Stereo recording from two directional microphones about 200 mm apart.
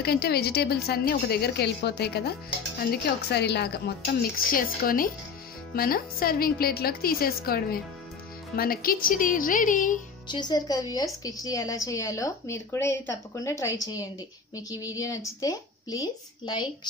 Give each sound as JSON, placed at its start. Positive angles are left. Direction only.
{"t": 0.0, "sound": "a woman's voice", "side_deg": 50}
{"t": 10.2, "sound": "a woman's voice", "side_deg": 20}